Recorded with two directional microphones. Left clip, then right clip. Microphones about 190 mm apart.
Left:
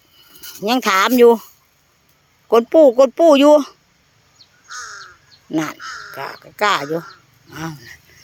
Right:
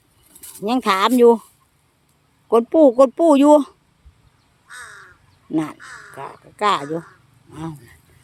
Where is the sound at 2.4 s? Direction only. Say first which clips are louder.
Left 3 dB; 5° left (ahead or behind).